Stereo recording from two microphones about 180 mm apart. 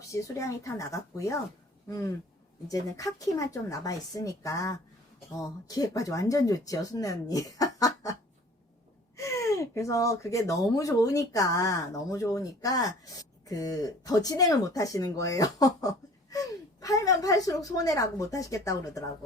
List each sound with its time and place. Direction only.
0.1 s speech: 15° left (ahead or behind)
2.6 s speech: 20° left (ahead or behind)
9.1 s speech: 15° left (ahead or behind)